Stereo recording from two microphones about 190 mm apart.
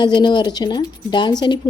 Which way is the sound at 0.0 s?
25° left (ahead or behind).